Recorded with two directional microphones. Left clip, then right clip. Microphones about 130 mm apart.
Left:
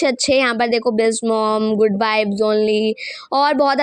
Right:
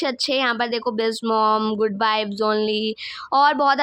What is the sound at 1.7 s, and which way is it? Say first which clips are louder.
A woman's voice: left 4 dB; 30° left (ahead or behind).